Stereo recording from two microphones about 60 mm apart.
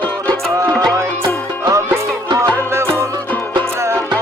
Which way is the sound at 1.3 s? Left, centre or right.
Right.